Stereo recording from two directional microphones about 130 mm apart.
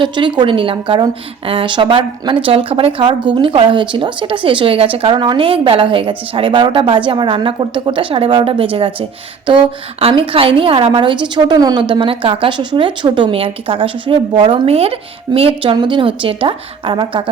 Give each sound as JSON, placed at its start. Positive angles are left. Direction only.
{"t": 0.0, "sound": "a woman's voice", "side_deg": -40}